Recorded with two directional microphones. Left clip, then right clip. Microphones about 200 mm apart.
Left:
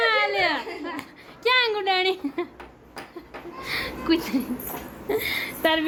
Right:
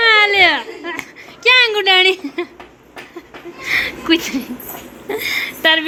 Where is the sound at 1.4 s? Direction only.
5° right (ahead or behind).